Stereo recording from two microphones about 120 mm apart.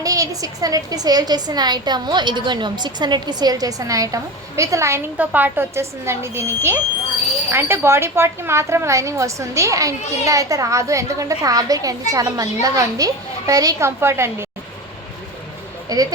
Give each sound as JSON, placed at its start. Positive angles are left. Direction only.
{"t": 0.0, "sound": "a woman's voice", "side_deg": -30}
{"t": 5.1, "sound": "a woman's voice", "side_deg": -15}
{"t": 15.9, "sound": "a woman's voice", "side_deg": -30}